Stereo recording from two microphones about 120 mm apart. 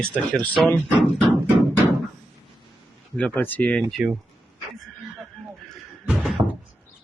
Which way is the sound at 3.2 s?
15° left (ahead or behind).